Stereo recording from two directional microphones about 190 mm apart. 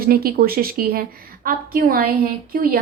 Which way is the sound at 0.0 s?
50° right (ahead or behind).